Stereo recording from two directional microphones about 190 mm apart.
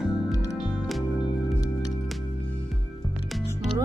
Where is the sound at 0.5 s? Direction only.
Centre (ahead or behind).